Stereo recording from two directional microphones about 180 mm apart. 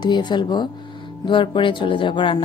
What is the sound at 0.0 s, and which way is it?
Speech, 25° left (ahead or behind).